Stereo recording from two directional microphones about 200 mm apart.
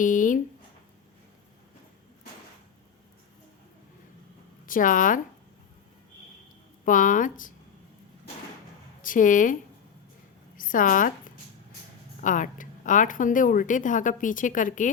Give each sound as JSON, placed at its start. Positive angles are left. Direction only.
{"t": 0.0, "sound": "speech", "side_deg": 40}
{"t": 4.6, "sound": "speech", "side_deg": 40}
{"t": 6.8, "sound": "speech", "side_deg": 40}
{"t": 9.0, "sound": "a woman's voice", "side_deg": 40}
{"t": 10.6, "sound": "speech", "side_deg": 40}
{"t": 12.2, "sound": "speech", "side_deg": 40}